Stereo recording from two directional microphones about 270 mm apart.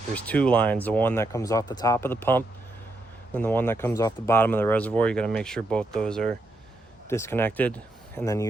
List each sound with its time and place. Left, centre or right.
0.1 s speech: centre